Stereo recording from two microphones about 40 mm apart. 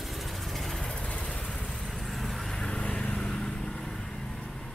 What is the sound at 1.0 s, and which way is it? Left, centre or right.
Vehicle, left.